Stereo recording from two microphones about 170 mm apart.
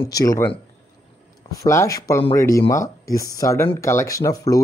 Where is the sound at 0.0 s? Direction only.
20° left (ahead or behind).